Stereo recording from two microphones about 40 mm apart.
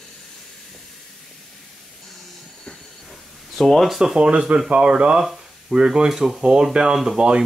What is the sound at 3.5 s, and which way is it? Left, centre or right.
Speech, centre.